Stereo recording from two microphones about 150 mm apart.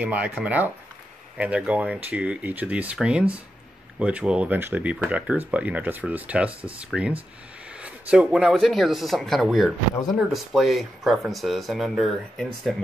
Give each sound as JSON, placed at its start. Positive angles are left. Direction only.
{"t": 0.0, "sound": "speech", "side_deg": -10}